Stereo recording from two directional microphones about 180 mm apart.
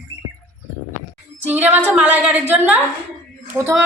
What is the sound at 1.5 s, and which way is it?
A woman's voice, 10° right (ahead or behind).